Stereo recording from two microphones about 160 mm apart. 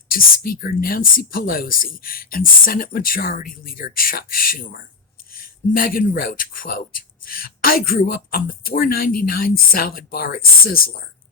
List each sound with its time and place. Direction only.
0.1 s speech: 65° left (ahead or behind)